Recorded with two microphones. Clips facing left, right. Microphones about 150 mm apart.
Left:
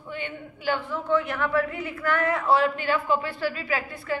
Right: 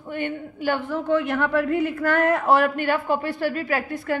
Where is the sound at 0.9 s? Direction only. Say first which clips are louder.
Right 4 dB; 70° right (ahead or behind).